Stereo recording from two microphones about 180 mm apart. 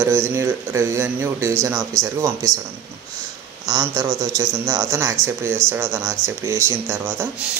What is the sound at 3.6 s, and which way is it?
Speech, 20° right (ahead or behind).